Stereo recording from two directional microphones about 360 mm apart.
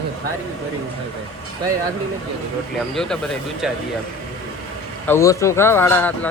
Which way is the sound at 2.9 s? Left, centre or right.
Centre.